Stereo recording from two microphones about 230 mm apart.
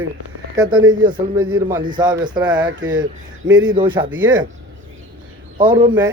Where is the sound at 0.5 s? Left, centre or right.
Centre.